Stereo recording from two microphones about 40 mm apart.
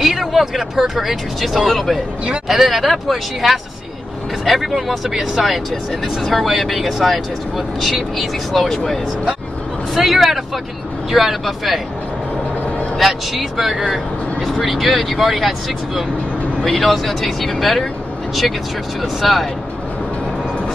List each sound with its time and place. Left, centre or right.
0.2 s a sound: centre
0.6 s speech: centre
12.9 s speech: centre
16.6 s speech: centre
18.9 s speech: centre